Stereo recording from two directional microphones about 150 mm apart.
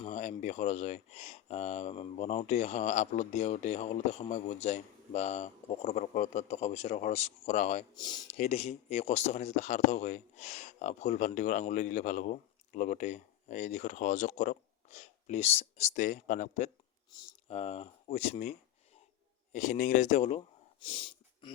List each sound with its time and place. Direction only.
0.1 s speech: 50° left (ahead or behind)
7.9 s speech: 30° left (ahead or behind)
8.4 s speech: 45° left (ahead or behind)
17.1 s speech: 30° left (ahead or behind)
17.5 s speech: 45° left (ahead or behind)
19.5 s speech: 55° left (ahead or behind)
20.8 s a sound: 35° left (ahead or behind)